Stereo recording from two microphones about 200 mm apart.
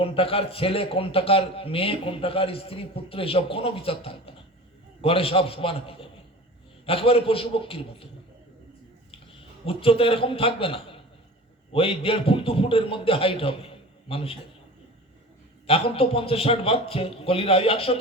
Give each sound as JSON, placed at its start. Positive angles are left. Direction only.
{"t": 0.0, "sound": "a man's voice", "side_deg": 30}
{"t": 9.6, "sound": "a man's voice", "side_deg": 30}
{"t": 15.6, "sound": "a man's voice", "side_deg": 30}